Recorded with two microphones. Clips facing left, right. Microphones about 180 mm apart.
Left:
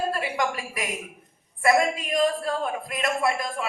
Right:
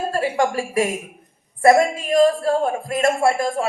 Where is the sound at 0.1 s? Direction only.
45° right (ahead or behind).